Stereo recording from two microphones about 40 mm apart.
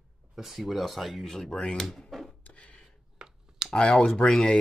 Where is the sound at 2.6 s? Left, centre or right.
Left.